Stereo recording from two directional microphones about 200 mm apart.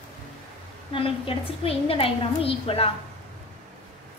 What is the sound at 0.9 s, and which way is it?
A woman's voice, 30° left (ahead or behind).